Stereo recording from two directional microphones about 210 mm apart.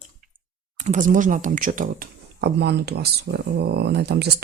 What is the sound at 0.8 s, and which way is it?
Speech, 35° right (ahead or behind).